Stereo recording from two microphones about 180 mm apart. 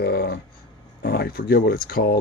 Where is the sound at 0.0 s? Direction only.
60° left (ahead or behind).